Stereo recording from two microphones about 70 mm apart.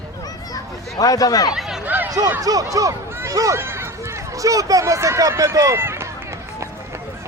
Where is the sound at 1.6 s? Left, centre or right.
Centre.